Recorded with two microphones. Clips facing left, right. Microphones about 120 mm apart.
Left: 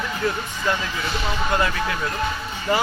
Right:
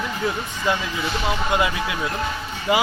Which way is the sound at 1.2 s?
15° right (ahead or behind).